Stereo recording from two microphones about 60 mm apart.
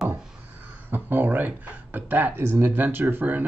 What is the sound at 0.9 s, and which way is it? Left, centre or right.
Speech, right.